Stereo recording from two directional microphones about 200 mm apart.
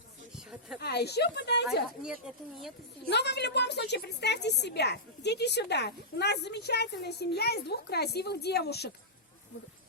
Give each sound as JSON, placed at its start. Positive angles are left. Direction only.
{"t": 0.8, "sound": "a woman's voice", "side_deg": 55}
{"t": 2.0, "sound": "a woman's voice", "side_deg": 0}
{"t": 3.1, "sound": "a woman's voice", "side_deg": 55}